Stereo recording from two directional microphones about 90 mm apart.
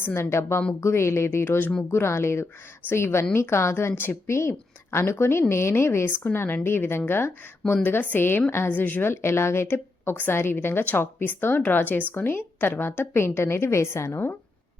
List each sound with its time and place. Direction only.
0.0 s a woman's voice: 30° left (ahead or behind)